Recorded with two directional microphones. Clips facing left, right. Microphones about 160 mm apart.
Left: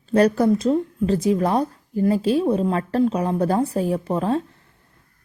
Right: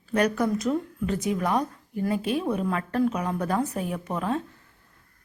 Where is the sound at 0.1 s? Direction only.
30° left (ahead or behind).